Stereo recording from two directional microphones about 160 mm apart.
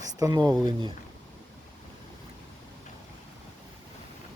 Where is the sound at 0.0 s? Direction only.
20° right (ahead or behind).